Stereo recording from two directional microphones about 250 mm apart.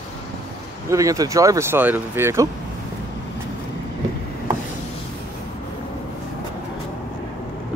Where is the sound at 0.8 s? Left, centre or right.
Centre.